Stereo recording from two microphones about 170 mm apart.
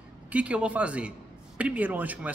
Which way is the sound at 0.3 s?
5° right (ahead or behind).